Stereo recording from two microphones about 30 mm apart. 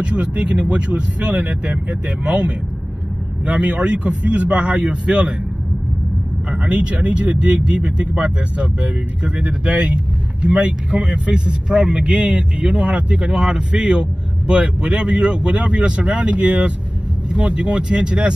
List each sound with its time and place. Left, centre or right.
0.0 s speech: right
3.5 s speech: right
6.5 s speech: right
6.8 s speech: right
7.7 s speech: right
8.1 s speech: right
13.4 s speech: right